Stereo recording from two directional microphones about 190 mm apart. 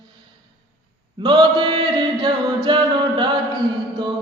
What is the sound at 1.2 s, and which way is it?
Mantra, 20° right (ahead or behind).